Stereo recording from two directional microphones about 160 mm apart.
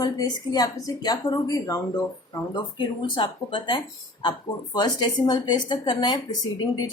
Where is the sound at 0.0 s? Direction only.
25° left (ahead or behind).